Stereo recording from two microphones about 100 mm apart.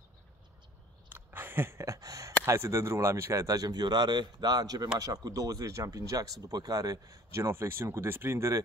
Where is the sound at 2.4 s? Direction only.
30° right (ahead or behind).